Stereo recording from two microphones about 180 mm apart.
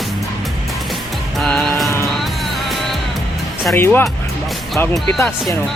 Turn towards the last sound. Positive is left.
turn(degrees=10)  # may be behind; listen again after turning